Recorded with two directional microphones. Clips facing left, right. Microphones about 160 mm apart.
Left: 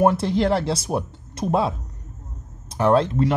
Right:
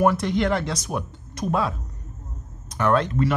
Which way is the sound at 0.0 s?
30° left (ahead or behind).